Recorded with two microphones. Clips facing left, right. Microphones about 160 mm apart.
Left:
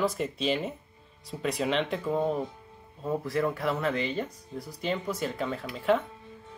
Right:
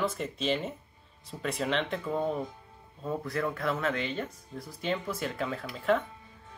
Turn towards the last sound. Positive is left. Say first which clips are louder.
# left 2 dB
turn(degrees=0)  # may be behind; listen again after turning